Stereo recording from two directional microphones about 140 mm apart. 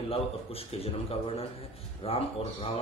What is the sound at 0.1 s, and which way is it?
A man's voice, 45° left (ahead or behind).